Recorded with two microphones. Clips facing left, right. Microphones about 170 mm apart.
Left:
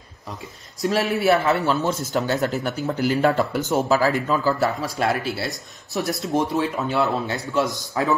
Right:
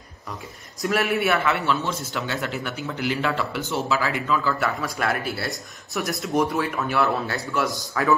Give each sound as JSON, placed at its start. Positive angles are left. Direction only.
{"t": 1.0, "sound": "a man's voice", "side_deg": 35}
{"t": 6.0, "sound": "speech", "side_deg": 0}
{"t": 6.5, "sound": "speech", "side_deg": 20}